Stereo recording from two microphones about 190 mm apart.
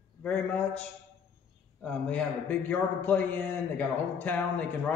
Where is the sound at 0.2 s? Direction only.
10° left (ahead or behind).